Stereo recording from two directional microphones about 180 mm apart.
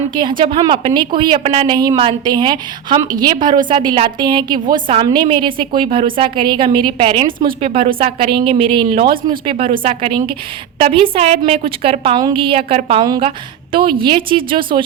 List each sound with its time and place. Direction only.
0.1 s a woman's voice: 25° right (ahead or behind)